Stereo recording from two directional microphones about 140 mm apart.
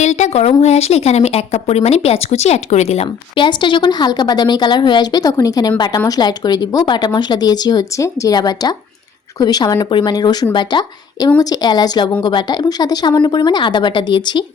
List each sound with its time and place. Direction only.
0.0 s speech: 55° left (ahead or behind); by 14.4 s 35° left (ahead or behind)